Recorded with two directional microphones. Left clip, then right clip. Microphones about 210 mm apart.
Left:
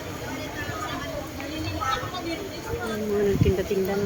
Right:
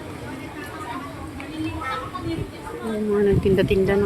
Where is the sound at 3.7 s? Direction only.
40° right (ahead or behind).